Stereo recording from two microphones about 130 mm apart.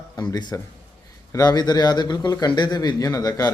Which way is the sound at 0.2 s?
30° left (ahead or behind).